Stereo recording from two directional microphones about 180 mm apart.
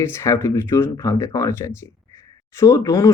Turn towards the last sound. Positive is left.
turn(degrees=15)  # may be behind; listen again after turning